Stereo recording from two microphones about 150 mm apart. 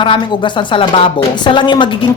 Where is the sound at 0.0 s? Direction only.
30° left (ahead or behind).